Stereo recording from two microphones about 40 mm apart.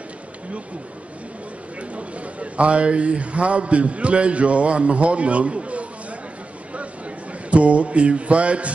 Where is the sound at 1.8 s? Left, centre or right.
Right.